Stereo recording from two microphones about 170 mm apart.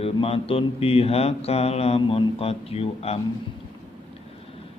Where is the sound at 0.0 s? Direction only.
35° left (ahead or behind).